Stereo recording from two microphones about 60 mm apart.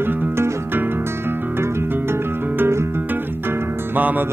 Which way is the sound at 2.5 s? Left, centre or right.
Right.